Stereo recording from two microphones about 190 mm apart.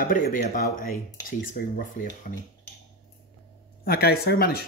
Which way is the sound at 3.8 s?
55° left (ahead or behind).